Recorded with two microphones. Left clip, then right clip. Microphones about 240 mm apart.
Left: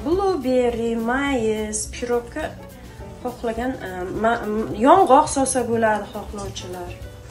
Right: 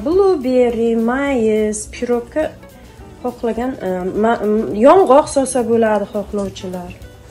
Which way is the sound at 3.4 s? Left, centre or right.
Right.